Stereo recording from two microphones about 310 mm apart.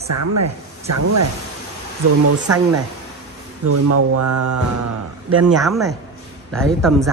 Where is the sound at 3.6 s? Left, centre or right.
Right.